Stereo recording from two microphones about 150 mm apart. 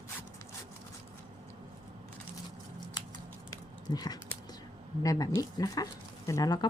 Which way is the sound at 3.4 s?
25° left (ahead or behind).